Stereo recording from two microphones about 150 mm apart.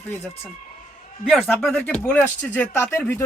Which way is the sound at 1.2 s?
5° left (ahead or behind).